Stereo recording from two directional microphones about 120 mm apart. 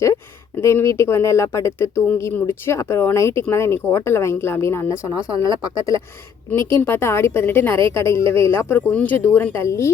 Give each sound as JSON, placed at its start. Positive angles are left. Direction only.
{"t": 0.6, "sound": "a woman's voice", "side_deg": 25}